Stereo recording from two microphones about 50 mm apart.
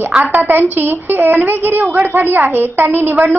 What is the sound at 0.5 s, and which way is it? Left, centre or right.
A woman's voice, right.